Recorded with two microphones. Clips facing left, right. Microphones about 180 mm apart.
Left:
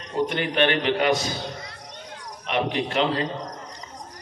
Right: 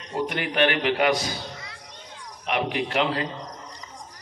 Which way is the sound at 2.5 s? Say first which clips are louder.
Left 1 dB; 30° left (ahead or behind).